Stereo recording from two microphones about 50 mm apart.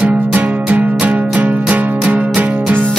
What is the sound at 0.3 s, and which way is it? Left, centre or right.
Music, right.